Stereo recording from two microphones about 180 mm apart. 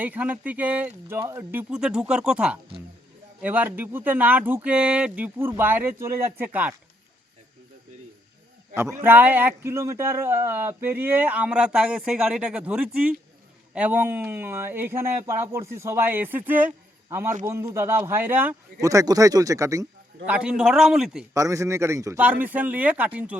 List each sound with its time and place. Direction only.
0.0 s speech: 10° right (ahead or behind)
8.7 s speech: 15° right (ahead or behind)
20.2 s speech: 5° right (ahead or behind)
21.3 s speech: 15° right (ahead or behind)